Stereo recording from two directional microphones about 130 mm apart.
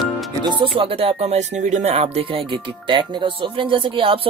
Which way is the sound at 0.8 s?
50° right (ahead or behind).